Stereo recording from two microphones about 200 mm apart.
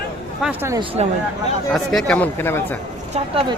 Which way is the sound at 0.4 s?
10° right (ahead or behind).